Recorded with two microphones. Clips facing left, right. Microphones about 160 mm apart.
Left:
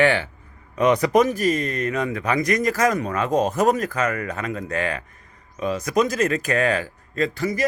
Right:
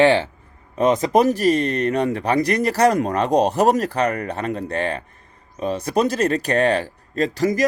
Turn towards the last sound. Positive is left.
turn(degrees=-40)  # may be behind; listen again after turning